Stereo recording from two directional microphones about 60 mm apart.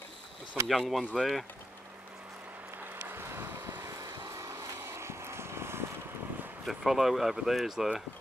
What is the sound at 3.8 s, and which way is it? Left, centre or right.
Vehicle, right.